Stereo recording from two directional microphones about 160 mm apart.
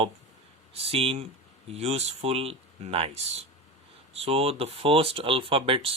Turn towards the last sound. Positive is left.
turn(degrees=-35)  # may be behind; listen again after turning